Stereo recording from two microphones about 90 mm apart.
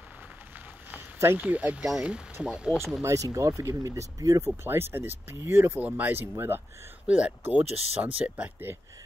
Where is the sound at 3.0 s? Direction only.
35° right (ahead or behind).